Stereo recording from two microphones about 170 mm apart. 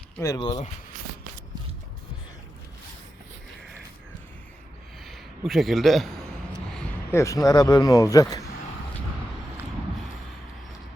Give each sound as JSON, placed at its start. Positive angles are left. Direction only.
{"t": 0.2, "sound": "speech", "side_deg": 20}
{"t": 5.0, "sound": "a sound", "side_deg": 0}
{"t": 7.2, "sound": "speech", "side_deg": 20}